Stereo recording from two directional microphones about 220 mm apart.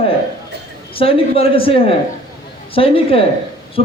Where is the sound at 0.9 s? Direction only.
25° left (ahead or behind).